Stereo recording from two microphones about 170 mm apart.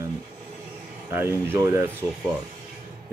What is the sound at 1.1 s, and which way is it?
Speech, 15° right (ahead or behind).